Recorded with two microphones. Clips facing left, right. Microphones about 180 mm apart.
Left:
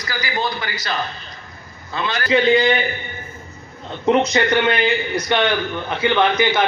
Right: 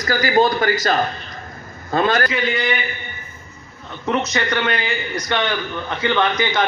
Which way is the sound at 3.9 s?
20° left (ahead or behind).